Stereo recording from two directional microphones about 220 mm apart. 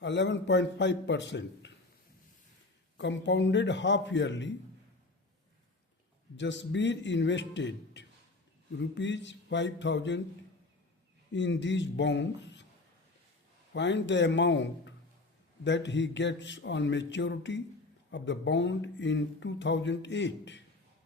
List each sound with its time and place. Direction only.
0.0 s speech: 55° left (ahead or behind)
3.0 s speech: 55° left (ahead or behind)
6.3 s a man's voice: 55° left (ahead or behind)
11.3 s a man's voice: 55° left (ahead or behind)
13.7 s a man's voice: 55° left (ahead or behind)